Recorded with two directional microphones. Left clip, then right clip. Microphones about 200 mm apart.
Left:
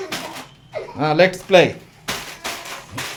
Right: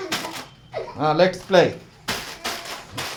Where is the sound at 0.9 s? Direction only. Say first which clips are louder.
Left 3 dB; 40° left (ahead or behind).